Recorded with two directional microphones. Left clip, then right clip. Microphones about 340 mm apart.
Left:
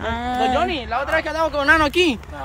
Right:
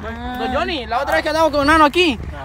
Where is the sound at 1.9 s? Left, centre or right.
Centre.